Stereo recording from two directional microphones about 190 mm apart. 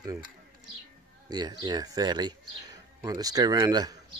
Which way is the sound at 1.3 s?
20° right (ahead or behind).